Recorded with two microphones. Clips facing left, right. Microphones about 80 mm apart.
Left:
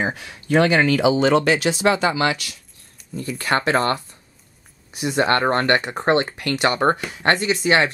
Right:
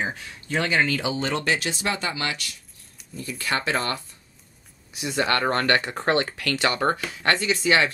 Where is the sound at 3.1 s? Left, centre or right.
Left.